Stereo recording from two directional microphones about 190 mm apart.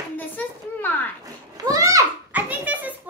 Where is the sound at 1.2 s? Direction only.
20° right (ahead or behind).